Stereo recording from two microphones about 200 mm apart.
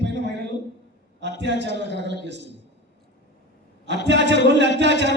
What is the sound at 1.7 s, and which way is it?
Speech, 60° left (ahead or behind).